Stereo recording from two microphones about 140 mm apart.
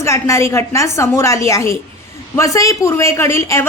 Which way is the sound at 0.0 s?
20° left (ahead or behind).